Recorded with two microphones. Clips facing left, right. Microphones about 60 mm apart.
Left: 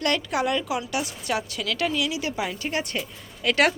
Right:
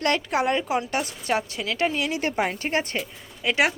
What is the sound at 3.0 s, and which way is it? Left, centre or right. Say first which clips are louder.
Speech: even; centre.